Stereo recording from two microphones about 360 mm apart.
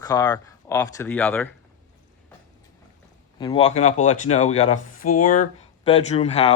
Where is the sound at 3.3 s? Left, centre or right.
Centre.